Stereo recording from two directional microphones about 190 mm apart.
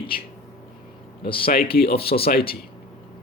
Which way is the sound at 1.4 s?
50° left (ahead or behind).